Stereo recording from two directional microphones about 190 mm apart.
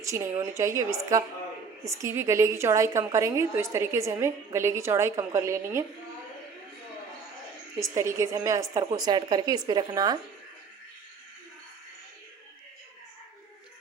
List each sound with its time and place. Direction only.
0.0 s a woman's voice: 15° right (ahead or behind)
7.8 s a woman's voice: 15° right (ahead or behind)